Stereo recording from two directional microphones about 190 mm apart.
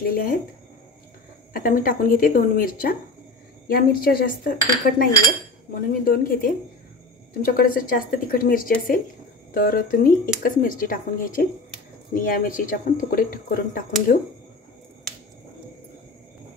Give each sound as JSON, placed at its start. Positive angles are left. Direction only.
{"t": 0.0, "sound": "speech", "side_deg": 50}
{"t": 1.5, "sound": "speech", "side_deg": 45}